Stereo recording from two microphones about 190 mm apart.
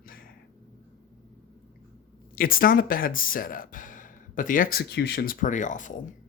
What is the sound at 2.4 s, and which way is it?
Speech, 50° left (ahead or behind).